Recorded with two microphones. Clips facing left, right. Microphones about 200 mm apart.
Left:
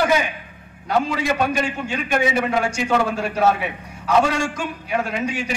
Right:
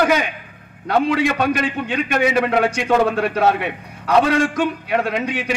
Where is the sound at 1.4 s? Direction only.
65° right (ahead or behind).